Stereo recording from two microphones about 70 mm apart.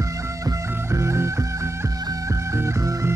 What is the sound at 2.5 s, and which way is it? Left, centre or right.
Music, right.